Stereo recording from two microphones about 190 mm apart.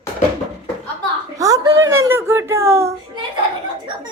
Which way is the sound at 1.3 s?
15° right (ahead or behind).